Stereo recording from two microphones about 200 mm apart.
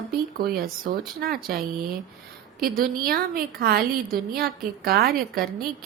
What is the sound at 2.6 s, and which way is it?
A woman's voice, 45° right (ahead or behind).